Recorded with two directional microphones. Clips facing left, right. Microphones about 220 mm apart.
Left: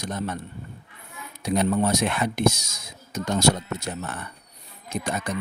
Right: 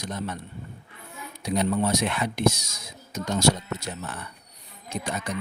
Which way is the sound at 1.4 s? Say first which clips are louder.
Left 2 dB; 50° left (ahead or behind).